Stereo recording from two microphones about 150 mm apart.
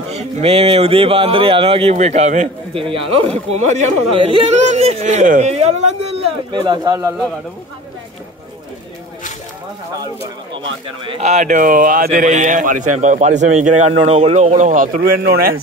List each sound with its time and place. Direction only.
0.1 s speech: 45° right (ahead or behind)
2.7 s speech: 35° right (ahead or behind)
4.3 s speech: 35° right (ahead or behind)
4.6 s speech: 50° right (ahead or behind)
6.5 s speech: 30° right (ahead or behind)
11.1 s a man's voice: 45° right (ahead or behind); by 15.5 s 90° right